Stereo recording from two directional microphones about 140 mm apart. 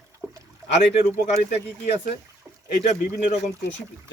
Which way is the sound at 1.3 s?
60° left (ahead or behind).